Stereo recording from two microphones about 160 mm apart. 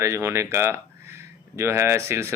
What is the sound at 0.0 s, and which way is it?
Speech, 15° right (ahead or behind).